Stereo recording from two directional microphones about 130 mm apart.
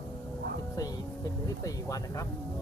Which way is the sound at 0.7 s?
25° left (ahead or behind).